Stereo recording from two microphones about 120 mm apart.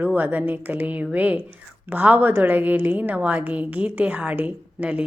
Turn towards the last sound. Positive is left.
turn(degrees=-10)  # may be behind; listen again after turning